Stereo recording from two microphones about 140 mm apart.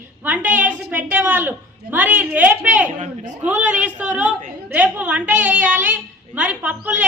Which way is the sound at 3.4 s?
65° right (ahead or behind).